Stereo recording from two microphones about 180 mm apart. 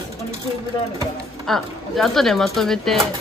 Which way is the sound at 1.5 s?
Centre (ahead or behind).